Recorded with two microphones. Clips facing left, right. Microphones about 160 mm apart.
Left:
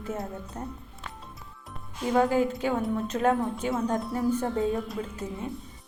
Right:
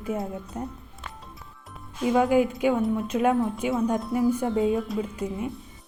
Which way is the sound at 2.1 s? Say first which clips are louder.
Right 2 dB; 15° right (ahead or behind).